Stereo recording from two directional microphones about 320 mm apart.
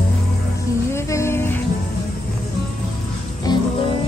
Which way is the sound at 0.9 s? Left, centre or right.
Centre.